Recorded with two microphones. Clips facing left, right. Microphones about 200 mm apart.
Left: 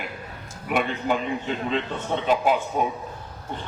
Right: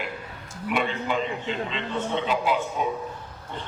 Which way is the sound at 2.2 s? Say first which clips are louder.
Left 7 dB; 50° left (ahead or behind).